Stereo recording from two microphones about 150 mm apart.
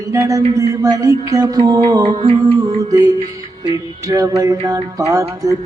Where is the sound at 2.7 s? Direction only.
25° right (ahead or behind).